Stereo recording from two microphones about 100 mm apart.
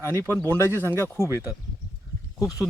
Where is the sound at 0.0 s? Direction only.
25° left (ahead or behind).